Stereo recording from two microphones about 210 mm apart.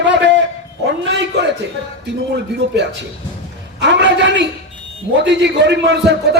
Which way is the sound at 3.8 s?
55° right (ahead or behind).